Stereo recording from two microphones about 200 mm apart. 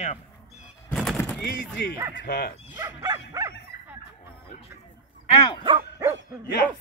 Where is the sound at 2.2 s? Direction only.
50° left (ahead or behind).